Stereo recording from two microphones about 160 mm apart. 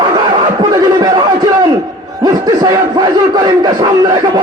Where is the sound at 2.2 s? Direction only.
25° right (ahead or behind).